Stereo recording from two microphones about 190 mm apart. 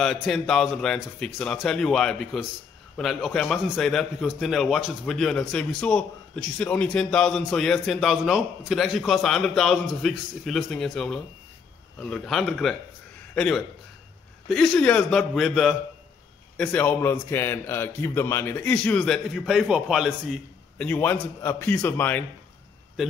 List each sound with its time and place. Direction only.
0.0 s a man's voice: centre (ahead or behind)